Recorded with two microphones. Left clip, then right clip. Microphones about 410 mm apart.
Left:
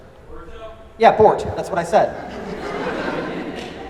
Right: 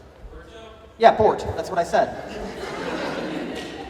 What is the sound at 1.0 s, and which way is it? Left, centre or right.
Speech, left.